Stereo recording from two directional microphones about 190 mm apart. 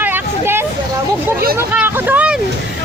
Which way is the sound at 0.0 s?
10° right (ahead or behind).